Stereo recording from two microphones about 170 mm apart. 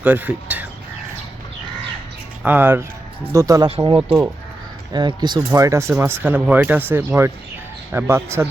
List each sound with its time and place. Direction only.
0.0 s speech: 10° right (ahead or behind)
2.4 s speech: 10° right (ahead or behind)